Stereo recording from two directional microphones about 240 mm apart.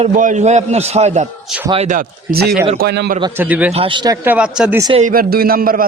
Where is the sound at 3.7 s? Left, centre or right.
Right.